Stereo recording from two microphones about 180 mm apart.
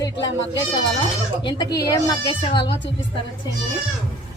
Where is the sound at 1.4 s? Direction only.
20° left (ahead or behind).